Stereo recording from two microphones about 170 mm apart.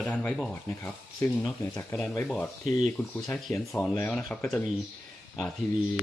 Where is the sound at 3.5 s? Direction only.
20° left (ahead or behind).